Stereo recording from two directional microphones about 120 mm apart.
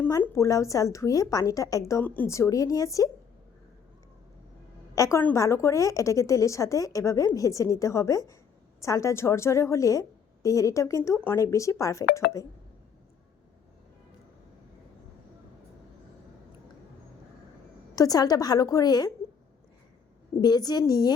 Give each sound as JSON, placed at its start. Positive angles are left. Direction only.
{"t": 0.2, "sound": "a woman's voice", "side_deg": 25}
{"t": 2.0, "sound": "a woman's voice", "side_deg": 15}
{"t": 4.9, "sound": "a woman's voice", "side_deg": 25}
{"t": 17.9, "sound": "a woman's voice", "side_deg": 30}
{"t": 20.4, "sound": "a woman's voice", "side_deg": 35}